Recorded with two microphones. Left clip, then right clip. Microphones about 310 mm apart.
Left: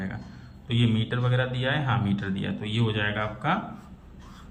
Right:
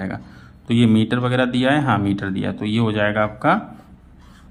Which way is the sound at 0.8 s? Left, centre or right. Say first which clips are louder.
Right 10 dB; right.